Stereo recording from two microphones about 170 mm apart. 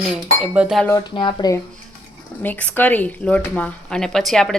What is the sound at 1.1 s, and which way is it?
Speech, 30° left (ahead or behind).